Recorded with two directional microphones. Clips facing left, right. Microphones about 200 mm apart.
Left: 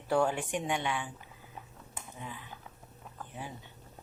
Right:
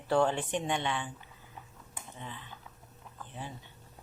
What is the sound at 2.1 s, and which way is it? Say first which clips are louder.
Speech: left 1 dB; 10° left (ahead or behind).